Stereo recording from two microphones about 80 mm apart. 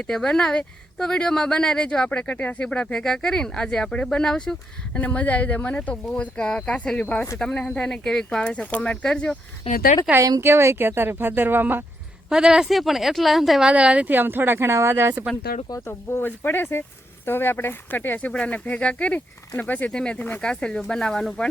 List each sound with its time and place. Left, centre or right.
0.1 s speech: centre
4.9 s speech: centre
10.2 s speech: right
10.4 s speech: right
12.3 s a woman's voice: centre
13.7 s speech: centre; by 15.1 s right
15.9 s speech: left; by 21.5 s centre